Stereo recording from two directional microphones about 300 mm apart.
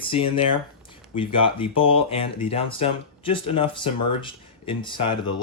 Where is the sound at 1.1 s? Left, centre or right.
Centre.